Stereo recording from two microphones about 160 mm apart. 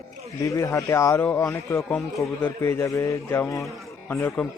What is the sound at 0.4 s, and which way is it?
A man's voice, 20° left (ahead or behind).